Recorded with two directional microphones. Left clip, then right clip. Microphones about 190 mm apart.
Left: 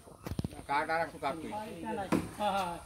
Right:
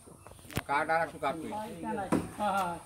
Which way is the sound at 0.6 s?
50° right (ahead or behind).